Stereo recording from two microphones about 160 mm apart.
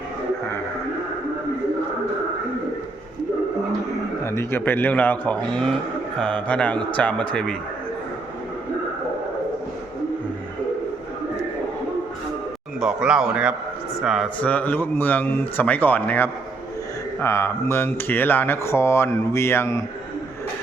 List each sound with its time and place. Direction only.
4.2 s speech: 15° left (ahead or behind)
12.8 s speech: 5° right (ahead or behind)
14.3 s speech: 10° left (ahead or behind)